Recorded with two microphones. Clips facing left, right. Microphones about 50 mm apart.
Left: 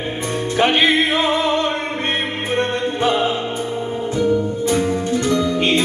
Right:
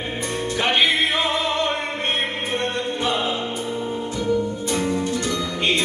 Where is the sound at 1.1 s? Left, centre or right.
Centre.